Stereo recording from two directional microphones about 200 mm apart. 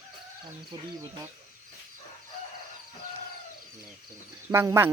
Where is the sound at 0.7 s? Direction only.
20° right (ahead or behind).